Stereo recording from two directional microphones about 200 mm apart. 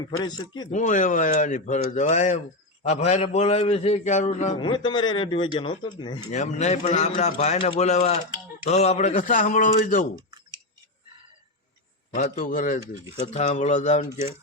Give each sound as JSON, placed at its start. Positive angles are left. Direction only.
{"t": 0.2, "sound": "speech", "side_deg": 20}
{"t": 0.7, "sound": "a man's voice", "side_deg": 40}
{"t": 4.5, "sound": "speech", "side_deg": 25}
{"t": 6.3, "sound": "a man's voice", "side_deg": 35}
{"t": 10.2, "sound": "clicking", "side_deg": -20}
{"t": 12.1, "sound": "a man's voice", "side_deg": 40}